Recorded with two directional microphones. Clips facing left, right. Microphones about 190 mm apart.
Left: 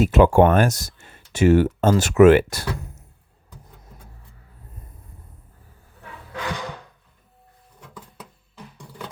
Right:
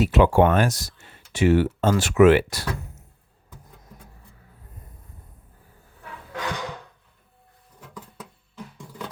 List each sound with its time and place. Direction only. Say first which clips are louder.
0.0 s speech: left 3 dB; 45° left (ahead or behind)